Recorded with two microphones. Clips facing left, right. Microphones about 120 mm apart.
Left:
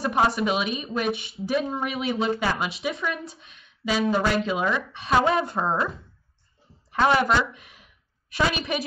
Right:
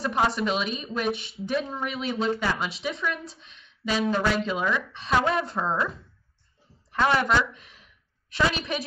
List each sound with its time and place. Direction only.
0.3 s speech: 5° left (ahead or behind)
5.6 s speech: 20° left (ahead or behind)
7.2 s a woman's voice: 5° left (ahead or behind)